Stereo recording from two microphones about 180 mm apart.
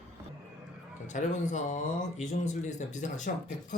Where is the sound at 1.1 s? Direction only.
40° left (ahead or behind).